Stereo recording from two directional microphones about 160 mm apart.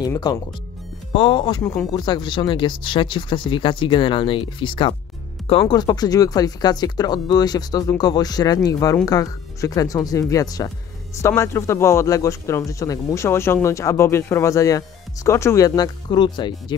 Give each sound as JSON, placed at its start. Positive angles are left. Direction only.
{"t": 0.0, "sound": "speech", "side_deg": 25}